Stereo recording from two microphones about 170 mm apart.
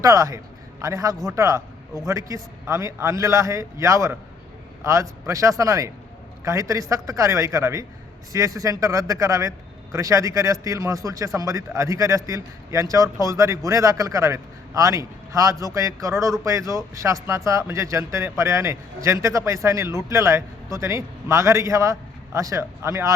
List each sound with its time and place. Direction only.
0.0 s a man's voice: 20° right (ahead or behind)